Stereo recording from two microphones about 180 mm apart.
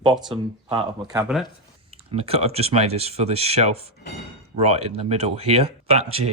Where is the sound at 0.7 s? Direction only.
30° right (ahead or behind).